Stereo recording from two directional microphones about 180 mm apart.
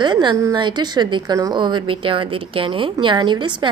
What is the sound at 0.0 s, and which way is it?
A woman's voice, 25° right (ahead or behind).